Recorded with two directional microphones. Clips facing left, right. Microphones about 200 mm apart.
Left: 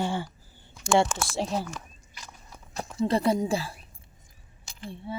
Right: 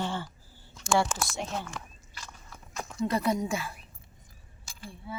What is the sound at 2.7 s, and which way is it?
Speech, 30° left (ahead or behind).